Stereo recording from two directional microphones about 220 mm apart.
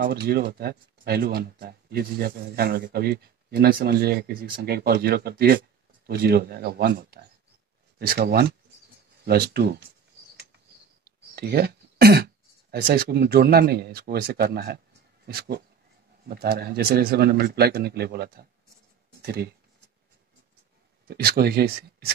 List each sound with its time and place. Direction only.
0.0 s speech: 45° right (ahead or behind)
11.1 s throat clearing: 45° right (ahead or behind)
12.7 s speech: 45° right (ahead or behind)
21.1 s speech: 45° right (ahead or behind)